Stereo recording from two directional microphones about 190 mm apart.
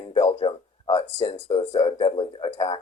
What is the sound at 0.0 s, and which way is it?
Speech, 25° left (ahead or behind).